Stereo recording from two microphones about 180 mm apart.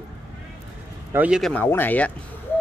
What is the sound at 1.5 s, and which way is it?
Speech, 10° left (ahead or behind).